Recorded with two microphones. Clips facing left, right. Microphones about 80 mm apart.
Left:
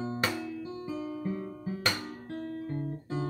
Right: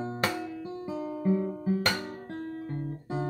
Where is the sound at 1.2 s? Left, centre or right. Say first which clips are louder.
Right 8 dB; right.